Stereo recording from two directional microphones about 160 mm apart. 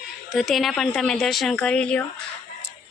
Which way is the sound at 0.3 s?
Centre (ahead or behind).